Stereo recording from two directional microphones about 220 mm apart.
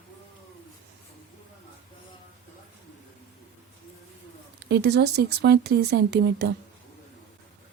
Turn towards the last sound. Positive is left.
turn(degrees=-45)  # may be behind; listen again after turning